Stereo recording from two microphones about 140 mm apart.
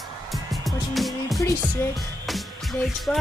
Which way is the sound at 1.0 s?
Centre (ahead or behind).